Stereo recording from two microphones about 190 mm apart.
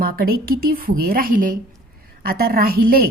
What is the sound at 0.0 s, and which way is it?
A woman's voice, 50° right (ahead or behind).